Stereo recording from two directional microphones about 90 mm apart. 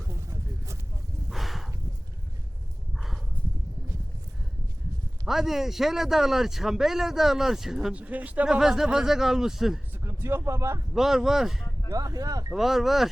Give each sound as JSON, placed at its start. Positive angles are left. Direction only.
{"t": 0.1, "sound": "a sound", "side_deg": -35}
{"t": 1.3, "sound": "a sound", "side_deg": 0}
{"t": 3.4, "sound": "a sound", "side_deg": 15}
{"t": 5.2, "sound": "a man's voice", "side_deg": -5}
{"t": 7.9, "sound": "a man's voice", "side_deg": -15}
{"t": 10.0, "sound": "speech", "side_deg": -30}
{"t": 10.9, "sound": "a man's voice", "side_deg": -5}
{"t": 11.9, "sound": "speech", "side_deg": -40}
{"t": 12.5, "sound": "a man's voice", "side_deg": -5}